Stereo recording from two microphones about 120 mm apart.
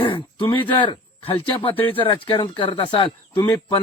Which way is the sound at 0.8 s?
45° left (ahead or behind).